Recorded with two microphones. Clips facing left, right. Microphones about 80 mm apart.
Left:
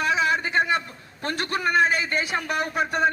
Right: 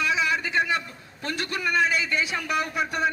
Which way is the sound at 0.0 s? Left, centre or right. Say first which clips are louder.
Left 2 dB; left.